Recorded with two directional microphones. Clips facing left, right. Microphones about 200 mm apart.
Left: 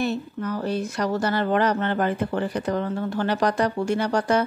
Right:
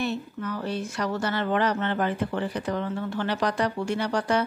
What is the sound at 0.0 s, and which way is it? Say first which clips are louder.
Speech: left 3 dB; 40° left (ahead or behind).